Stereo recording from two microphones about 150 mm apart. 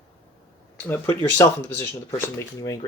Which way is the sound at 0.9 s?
20° left (ahead or behind).